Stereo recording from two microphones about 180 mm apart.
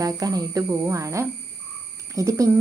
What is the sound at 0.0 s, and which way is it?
Speech, 20° right (ahead or behind).